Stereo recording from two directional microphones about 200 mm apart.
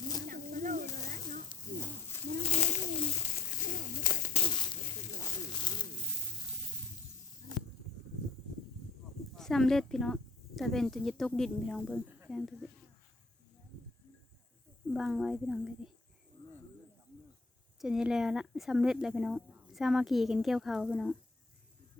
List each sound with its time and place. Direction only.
0.3 s snake: 40° right (ahead or behind)
1.5 s a sound: 15° left (ahead or behind)
2.4 s pigeon: 35° left (ahead or behind)
4.0 s a sound: 45° left (ahead or behind)
4.4 s a sound: 25° left (ahead or behind)
9.3 s speech: centre (ahead or behind)
11.9 s speech: 10° right (ahead or behind)
14.9 s speech: centre (ahead or behind)
17.7 s speech: 5° right (ahead or behind)